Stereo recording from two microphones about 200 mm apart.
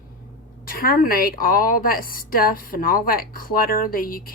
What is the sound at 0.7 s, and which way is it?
A woman's voice, 45° left (ahead or behind).